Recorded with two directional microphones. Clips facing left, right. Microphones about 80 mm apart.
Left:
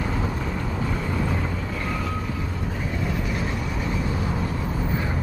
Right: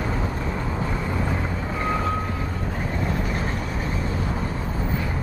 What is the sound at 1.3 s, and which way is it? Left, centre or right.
Vehicle, right.